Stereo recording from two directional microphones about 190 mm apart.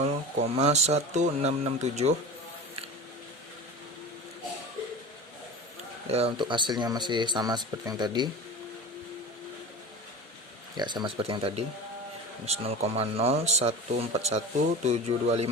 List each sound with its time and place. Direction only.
0.0 s speech: 35° right (ahead or behind)
6.1 s speech: 30° right (ahead or behind)
10.8 s speech: 25° right (ahead or behind)